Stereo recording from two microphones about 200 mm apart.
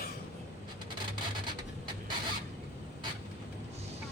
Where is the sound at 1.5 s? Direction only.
20° right (ahead or behind).